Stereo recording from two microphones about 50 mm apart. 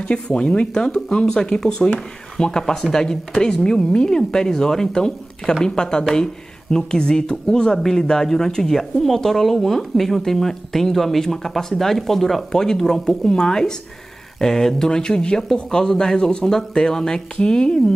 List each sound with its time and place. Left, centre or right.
0.0 s speech: centre